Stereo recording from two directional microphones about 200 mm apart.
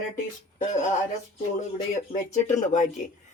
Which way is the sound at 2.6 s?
40° left (ahead or behind).